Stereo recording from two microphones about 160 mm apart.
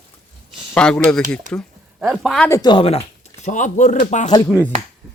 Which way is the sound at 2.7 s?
35° left (ahead or behind).